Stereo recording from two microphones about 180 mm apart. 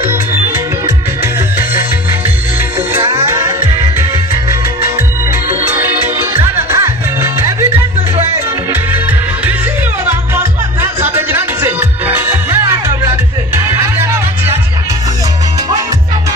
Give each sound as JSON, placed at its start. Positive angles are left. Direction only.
{"t": 0.0, "sound": "music", "side_deg": -15}
{"t": 2.9, "sound": "music", "side_deg": -15}
{"t": 8.7, "sound": "music", "side_deg": -10}
{"t": 14.0, "sound": "music", "side_deg": -15}